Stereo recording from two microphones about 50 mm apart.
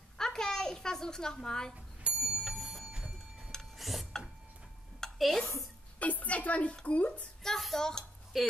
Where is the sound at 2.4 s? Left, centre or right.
Centre.